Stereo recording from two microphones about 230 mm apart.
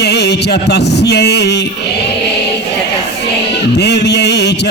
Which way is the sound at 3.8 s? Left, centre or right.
Left.